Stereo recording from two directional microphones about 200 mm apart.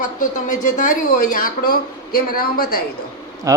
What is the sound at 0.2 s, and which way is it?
Speech, 40° left (ahead or behind).